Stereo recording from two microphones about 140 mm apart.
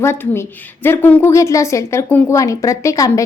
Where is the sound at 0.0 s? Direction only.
15° left (ahead or behind).